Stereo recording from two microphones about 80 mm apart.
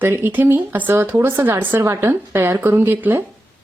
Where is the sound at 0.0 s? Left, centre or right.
Right.